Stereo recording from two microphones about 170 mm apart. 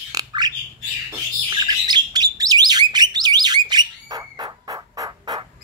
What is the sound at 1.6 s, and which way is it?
Bird, 25° right (ahead or behind).